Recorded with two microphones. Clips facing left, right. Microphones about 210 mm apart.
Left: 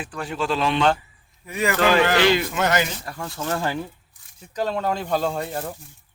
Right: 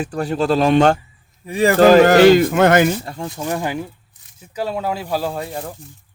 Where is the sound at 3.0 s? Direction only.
25° right (ahead or behind).